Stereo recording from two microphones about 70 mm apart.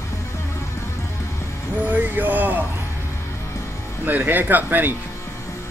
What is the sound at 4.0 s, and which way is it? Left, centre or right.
Speech, right.